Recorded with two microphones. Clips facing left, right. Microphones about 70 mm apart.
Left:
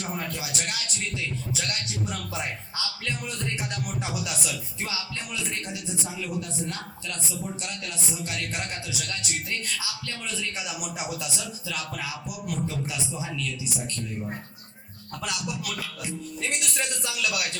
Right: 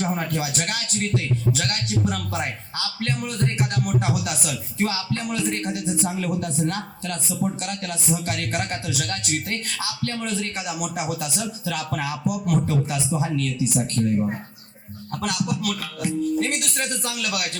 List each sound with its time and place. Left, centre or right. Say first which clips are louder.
0.2 s a man's voice: right 7 dB; right